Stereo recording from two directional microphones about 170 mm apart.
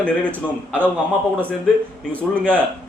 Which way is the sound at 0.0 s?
10° left (ahead or behind).